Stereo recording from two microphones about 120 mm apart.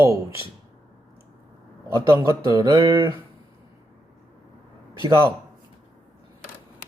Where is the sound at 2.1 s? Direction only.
25° right (ahead or behind).